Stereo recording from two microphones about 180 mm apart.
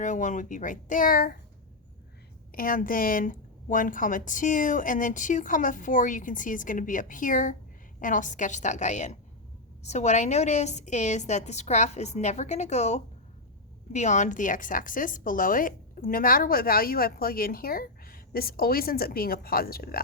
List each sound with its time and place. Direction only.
0.0 s a woman's voice: 40° left (ahead or behind)
2.5 s a woman's voice: 50° left (ahead or behind)